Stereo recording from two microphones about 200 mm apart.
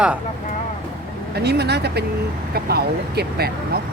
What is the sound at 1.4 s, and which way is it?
Speech, 55° right (ahead or behind).